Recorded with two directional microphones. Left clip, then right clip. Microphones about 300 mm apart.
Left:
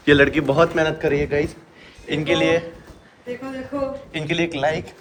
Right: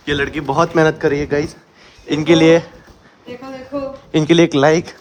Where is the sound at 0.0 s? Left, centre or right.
Centre.